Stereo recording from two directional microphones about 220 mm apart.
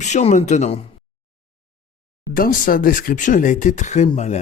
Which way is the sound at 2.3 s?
40° left (ahead or behind).